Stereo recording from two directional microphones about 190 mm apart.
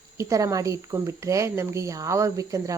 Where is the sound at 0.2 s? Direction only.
15° right (ahead or behind).